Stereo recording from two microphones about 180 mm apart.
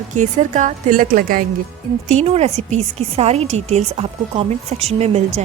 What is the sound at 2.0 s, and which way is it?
A woman's voice, 40° right (ahead or behind).